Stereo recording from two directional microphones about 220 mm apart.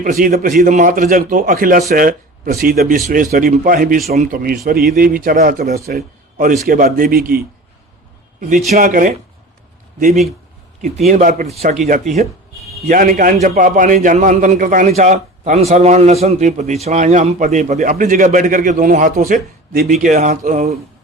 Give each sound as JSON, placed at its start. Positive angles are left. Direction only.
{"t": 0.0, "sound": "a man's voice", "side_deg": -40}
{"t": 11.1, "sound": "a man's voice", "side_deg": -35}